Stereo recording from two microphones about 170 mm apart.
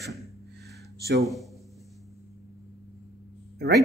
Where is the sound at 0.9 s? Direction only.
75° right (ahead or behind).